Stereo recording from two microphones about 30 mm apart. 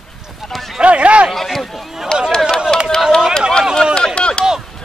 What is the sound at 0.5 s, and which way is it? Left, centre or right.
Run, centre.